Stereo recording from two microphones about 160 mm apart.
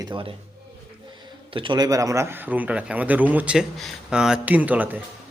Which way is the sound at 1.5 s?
30° right (ahead or behind).